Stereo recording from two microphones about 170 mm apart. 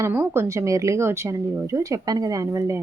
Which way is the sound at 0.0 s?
15° right (ahead or behind).